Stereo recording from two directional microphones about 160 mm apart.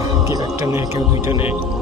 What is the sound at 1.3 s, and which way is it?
Speech, 35° left (ahead or behind).